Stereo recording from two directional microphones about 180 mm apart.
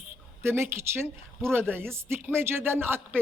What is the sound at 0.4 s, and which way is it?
A man's voice, 15° right (ahead or behind).